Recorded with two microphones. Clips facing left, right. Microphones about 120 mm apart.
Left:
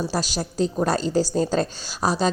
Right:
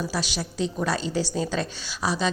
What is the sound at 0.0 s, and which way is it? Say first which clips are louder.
A woman's voice: left 3 dB; 40° left (ahead or behind).